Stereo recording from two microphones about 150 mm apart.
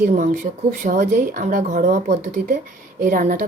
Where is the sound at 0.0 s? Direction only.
60° right (ahead or behind).